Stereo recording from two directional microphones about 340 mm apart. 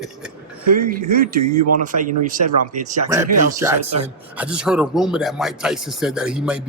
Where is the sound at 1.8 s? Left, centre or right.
Right.